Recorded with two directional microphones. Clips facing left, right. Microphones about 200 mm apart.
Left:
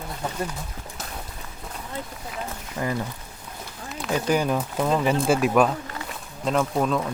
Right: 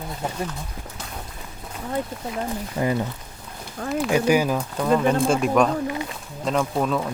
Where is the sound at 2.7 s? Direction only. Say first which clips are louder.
Right 4 dB; 20° right (ahead or behind).